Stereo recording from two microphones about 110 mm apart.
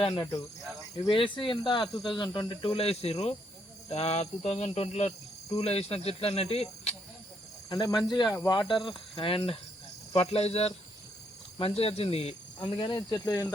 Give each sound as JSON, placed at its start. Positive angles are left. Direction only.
{"t": 1.0, "sound": "speech", "side_deg": 50}
{"t": 1.9, "sound": "speech", "side_deg": 0}
{"t": 2.1, "sound": "speech", "side_deg": 45}
{"t": 5.5, "sound": "speech", "side_deg": 70}
{"t": 7.7, "sound": "speech", "side_deg": 35}
{"t": 10.1, "sound": "speech", "side_deg": 65}
{"t": 11.6, "sound": "speech", "side_deg": 60}
{"t": 12.5, "sound": "speech", "side_deg": 45}